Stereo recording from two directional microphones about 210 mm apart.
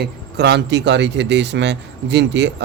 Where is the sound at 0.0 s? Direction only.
55° right (ahead or behind).